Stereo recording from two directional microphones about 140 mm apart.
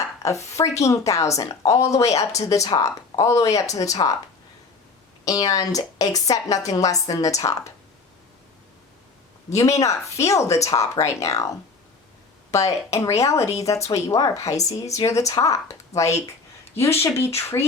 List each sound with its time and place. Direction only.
0.2 s a woman's voice: 20° left (ahead or behind)
5.2 s a woman's voice: 25° left (ahead or behind)
9.5 s a woman's voice: 20° left (ahead or behind)
12.5 s a woman's voice: 25° left (ahead or behind)
16.7 s a woman's voice: 15° left (ahead or behind)